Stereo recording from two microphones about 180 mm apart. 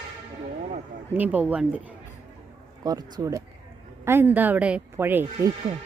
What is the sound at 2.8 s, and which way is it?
Speech, 20° right (ahead or behind).